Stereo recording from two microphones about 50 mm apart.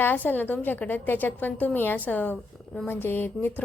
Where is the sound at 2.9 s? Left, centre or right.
Left.